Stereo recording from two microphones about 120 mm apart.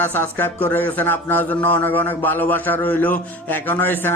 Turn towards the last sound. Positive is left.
turn(degrees=15)  # may be behind; listen again after turning